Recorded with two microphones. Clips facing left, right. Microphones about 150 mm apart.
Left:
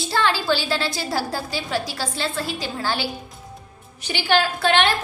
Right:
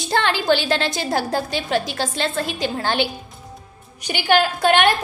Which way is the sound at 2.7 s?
60° right (ahead or behind).